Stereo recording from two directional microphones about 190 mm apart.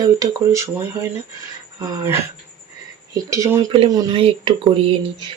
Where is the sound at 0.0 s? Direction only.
15° right (ahead or behind).